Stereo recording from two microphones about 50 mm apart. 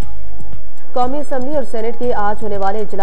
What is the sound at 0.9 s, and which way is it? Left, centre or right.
A woman's voice, left.